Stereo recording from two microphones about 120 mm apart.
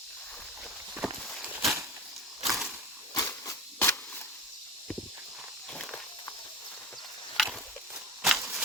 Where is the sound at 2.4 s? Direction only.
Centre (ahead or behind).